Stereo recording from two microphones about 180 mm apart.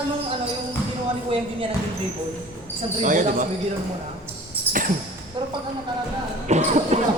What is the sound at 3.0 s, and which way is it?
Speech, 45° right (ahead or behind).